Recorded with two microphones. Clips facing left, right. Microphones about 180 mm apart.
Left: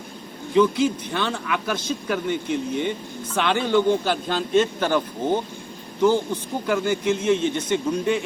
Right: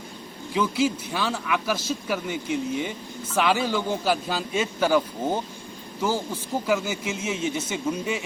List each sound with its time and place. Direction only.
0.5 s a man's voice: 5° right (ahead or behind)